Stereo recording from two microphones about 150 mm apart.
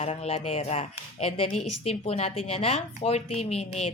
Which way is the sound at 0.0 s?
40° left (ahead or behind).